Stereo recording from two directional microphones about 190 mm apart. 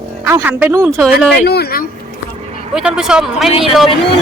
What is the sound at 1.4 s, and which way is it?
Speech, 55° left (ahead or behind).